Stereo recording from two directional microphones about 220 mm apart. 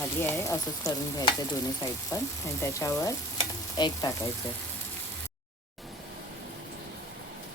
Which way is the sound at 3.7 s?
20° left (ahead or behind).